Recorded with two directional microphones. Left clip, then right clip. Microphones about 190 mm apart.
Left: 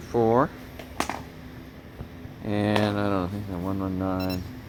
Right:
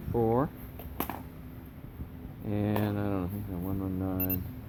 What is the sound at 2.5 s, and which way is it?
Speech, 30° left (ahead or behind).